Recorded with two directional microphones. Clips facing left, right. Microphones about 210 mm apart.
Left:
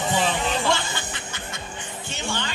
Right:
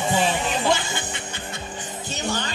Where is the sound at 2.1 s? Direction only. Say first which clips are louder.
Right 3 dB; 40° right (ahead or behind).